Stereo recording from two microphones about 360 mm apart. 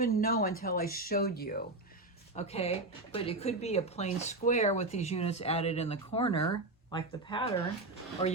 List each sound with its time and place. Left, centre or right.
0.0 s speech: left